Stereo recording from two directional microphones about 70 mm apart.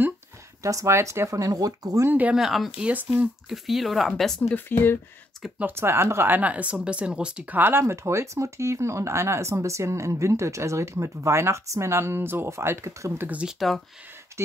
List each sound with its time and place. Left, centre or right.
0.6 s speech: right
1.3 s speech: right
2.0 s speech: right
2.3 s speech: centre
2.8 s speech: right
3.4 s speech: centre
4.6 s speech: left
5.8 s speech: right; by 7.4 s centre
7.5 s speech: right
7.8 s speech: right
13.6 s speech: centre